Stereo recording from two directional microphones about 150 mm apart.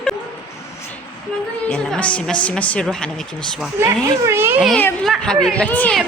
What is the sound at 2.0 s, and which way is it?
Speech, 10° left (ahead or behind).